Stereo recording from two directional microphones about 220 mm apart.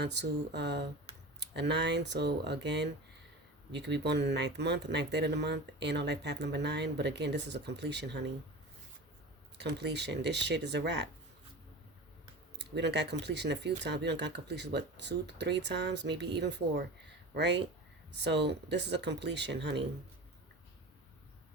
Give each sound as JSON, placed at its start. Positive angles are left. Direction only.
{"t": 0.0, "sound": "speech", "side_deg": -50}
{"t": 9.6, "sound": "speech", "side_deg": -50}
{"t": 12.5, "sound": "speech", "side_deg": -50}